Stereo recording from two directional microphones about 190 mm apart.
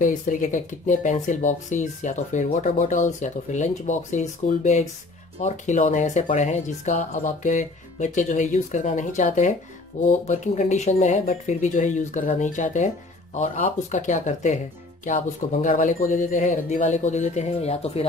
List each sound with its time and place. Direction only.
0.0 s speech: 45° left (ahead or behind)